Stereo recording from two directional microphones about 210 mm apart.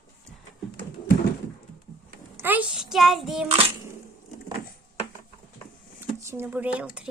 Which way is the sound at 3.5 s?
30° right (ahead or behind).